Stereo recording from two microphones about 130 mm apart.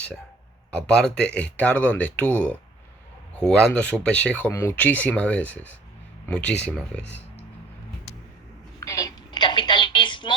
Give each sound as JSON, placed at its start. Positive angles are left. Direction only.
{"t": 0.7, "sound": "speech", "side_deg": 5}
{"t": 8.8, "sound": "telephone", "side_deg": 25}